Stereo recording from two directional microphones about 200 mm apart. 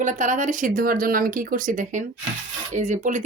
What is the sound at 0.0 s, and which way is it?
Speech, 40° right (ahead or behind).